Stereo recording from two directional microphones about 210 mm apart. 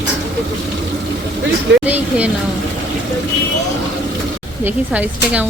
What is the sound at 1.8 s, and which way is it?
Speech, 5° right (ahead or behind).